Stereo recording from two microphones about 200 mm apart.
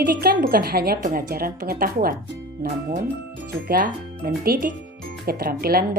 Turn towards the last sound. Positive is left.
turn(degrees=-50)  # may be behind; listen again after turning